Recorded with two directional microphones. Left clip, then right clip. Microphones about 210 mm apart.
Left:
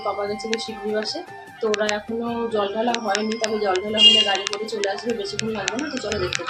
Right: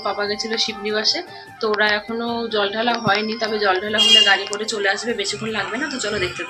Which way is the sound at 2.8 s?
15° right (ahead or behind).